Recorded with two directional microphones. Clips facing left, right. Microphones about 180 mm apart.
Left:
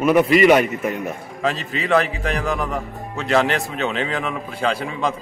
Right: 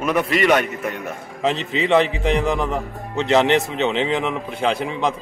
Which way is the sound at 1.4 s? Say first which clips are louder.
Right 3 dB; 20° right (ahead or behind).